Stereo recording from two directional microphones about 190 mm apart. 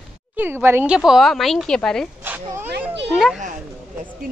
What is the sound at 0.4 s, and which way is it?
Speech, 10° right (ahead or behind).